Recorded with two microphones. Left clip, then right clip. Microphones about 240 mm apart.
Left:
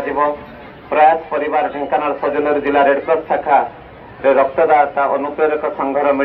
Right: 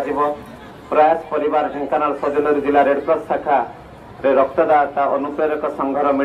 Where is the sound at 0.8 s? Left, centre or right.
Right.